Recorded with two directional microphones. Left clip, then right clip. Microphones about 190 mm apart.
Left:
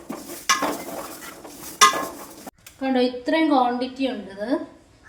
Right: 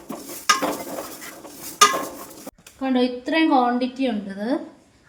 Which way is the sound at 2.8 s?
20° right (ahead or behind).